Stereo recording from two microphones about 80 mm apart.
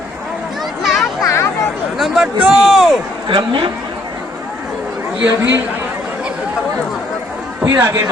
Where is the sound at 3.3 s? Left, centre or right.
Right.